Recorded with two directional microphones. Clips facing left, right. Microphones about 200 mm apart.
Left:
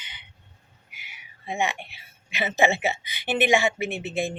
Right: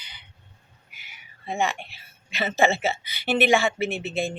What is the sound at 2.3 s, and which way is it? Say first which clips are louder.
A woman's voice: right 1 dB; 15° left (ahead or behind).